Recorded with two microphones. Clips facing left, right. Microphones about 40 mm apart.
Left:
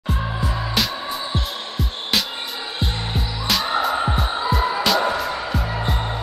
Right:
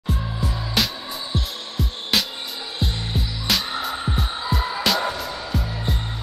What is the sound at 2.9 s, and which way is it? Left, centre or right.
Music, left.